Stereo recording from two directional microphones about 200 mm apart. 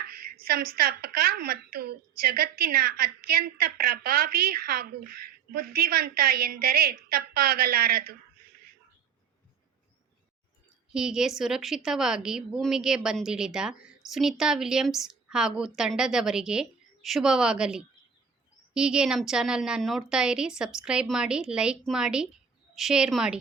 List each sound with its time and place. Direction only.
0.0 s a woman's voice: 45° right (ahead or behind)
10.9 s a woman's voice: 5° right (ahead or behind)